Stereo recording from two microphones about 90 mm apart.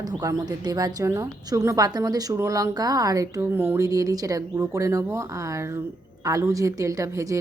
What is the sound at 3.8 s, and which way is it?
Speech, 40° right (ahead or behind).